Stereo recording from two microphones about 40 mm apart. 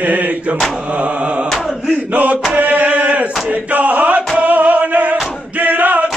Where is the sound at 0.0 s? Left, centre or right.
Right.